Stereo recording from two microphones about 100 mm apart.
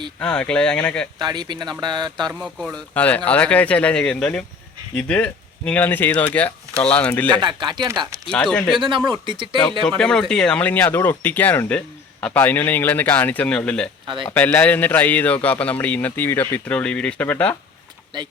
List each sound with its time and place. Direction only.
0.2 s a man's voice: 10° left (ahead or behind)
1.2 s speech: 45° right (ahead or behind)
2.7 s a man's voice: 15° left (ahead or behind)
7.3 s speech: 50° right (ahead or behind)
8.3 s a man's voice: 10° left (ahead or behind)
8.8 s speech: 55° right (ahead or behind)
10.0 s a man's voice: 5° left (ahead or behind)
18.1 s speech: 50° right (ahead or behind)